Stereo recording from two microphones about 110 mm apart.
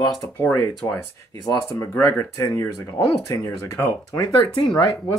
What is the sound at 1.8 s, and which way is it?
Speech, 25° left (ahead or behind).